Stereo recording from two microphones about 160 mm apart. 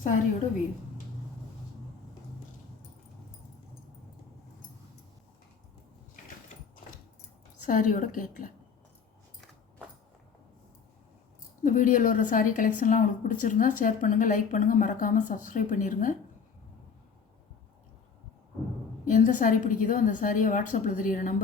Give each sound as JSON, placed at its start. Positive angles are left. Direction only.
{"t": 7.6, "sound": "a woman's voice", "side_deg": 55}
{"t": 11.6, "sound": "a woman's voice", "side_deg": 55}
{"t": 19.0, "sound": "a woman's voice", "side_deg": 55}